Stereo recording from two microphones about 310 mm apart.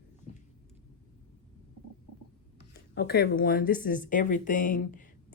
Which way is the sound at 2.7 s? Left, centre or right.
Left.